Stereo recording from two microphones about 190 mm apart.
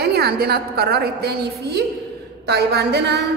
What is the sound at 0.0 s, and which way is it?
Speech, 55° right (ahead or behind).